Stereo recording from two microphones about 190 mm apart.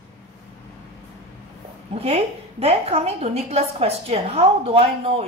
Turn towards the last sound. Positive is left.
turn(degrees=-30)  # may be behind; listen again after turning